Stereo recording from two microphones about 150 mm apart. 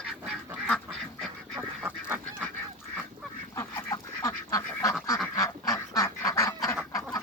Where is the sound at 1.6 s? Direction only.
10° right (ahead or behind).